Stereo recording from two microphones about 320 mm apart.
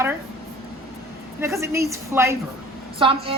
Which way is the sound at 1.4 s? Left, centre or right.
Centre.